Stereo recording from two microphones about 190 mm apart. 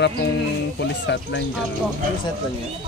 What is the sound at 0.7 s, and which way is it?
Speech, 65° left (ahead or behind).